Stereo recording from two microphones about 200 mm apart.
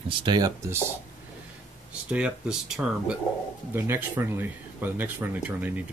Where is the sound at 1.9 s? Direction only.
5° right (ahead or behind).